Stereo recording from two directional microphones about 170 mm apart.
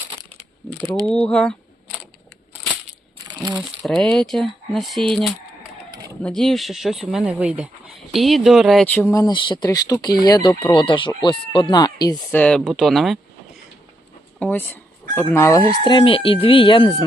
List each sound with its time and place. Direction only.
1.0 s a sound: 5° left (ahead or behind)
3.2 s crumpling: 25° right (ahead or behind)
3.8 s speech: 5° left (ahead or behind)
6.2 s speech: centre (ahead or behind)
8.1 s chicken: centre (ahead or behind); by 12.1 s 25° left (ahead or behind)
12.3 s speech: 5° left (ahead or behind)
14.3 s chicken: 10° left (ahead or behind); by 17.1 s 30° left (ahead or behind)